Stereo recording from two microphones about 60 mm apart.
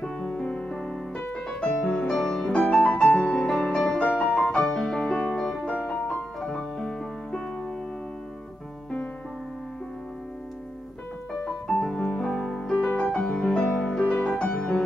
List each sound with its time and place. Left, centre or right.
0.0 s piano: centre
1.2 s music: left
11.4 s music: centre
14.2 s music: centre